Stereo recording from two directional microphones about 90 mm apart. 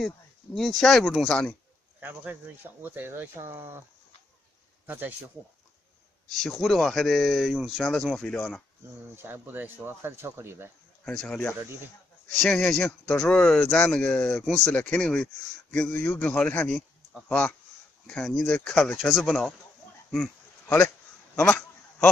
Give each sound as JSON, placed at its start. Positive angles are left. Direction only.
{"t": 0.6, "sound": "speech", "side_deg": 5}
{"t": 2.0, "sound": "speech", "side_deg": -20}
{"t": 4.8, "sound": "speech", "side_deg": -20}
{"t": 6.4, "sound": "speech", "side_deg": 0}
{"t": 9.1, "sound": "speech", "side_deg": -25}
{"t": 11.1, "sound": "speech", "side_deg": 10}
{"t": 12.4, "sound": "speech", "side_deg": 5}
{"t": 20.1, "sound": "a sound", "side_deg": 10}